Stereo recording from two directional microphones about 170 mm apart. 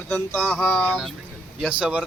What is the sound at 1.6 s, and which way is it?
Speech, 5° right (ahead or behind).